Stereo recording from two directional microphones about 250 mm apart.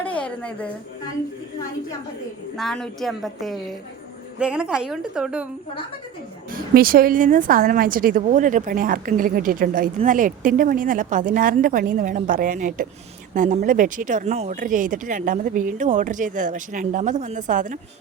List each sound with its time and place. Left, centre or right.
0.0 s music: centre
2.6 s a woman's voice: centre
6.5 s a woman's voice: right